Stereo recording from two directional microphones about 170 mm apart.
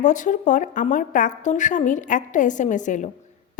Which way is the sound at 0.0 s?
50° left (ahead or behind).